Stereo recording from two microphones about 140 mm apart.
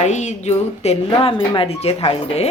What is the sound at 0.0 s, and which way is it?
Speech, 55° left (ahead or behind).